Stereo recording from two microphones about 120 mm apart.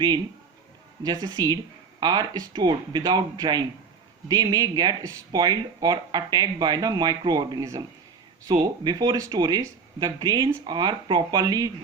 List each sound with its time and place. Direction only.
1.0 s speech: 35° right (ahead or behind)